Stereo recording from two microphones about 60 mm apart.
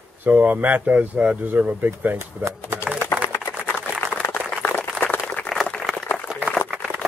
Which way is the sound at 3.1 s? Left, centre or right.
Left.